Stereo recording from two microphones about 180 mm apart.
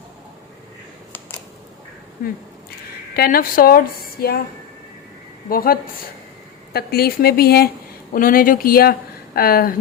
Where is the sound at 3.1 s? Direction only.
60° left (ahead or behind).